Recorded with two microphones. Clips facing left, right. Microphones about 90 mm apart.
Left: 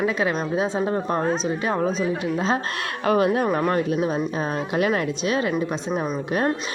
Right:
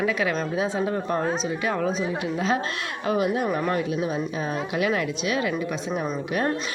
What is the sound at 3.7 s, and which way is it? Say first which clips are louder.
A woman's voice: left 3 dB; 45° left (ahead or behind).